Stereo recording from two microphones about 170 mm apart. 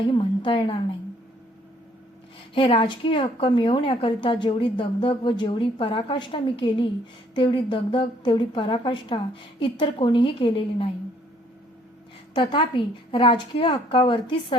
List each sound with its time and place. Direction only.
0.0 s a woman's voice: 30° left (ahead or behind)
2.6 s a woman's voice: 30° left (ahead or behind)
12.3 s a woman's voice: 30° left (ahead or behind)